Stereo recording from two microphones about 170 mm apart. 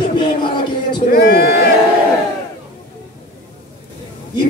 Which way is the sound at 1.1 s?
65° left (ahead or behind).